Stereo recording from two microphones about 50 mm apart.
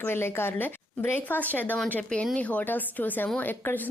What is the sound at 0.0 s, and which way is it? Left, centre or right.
A woman's voice, left.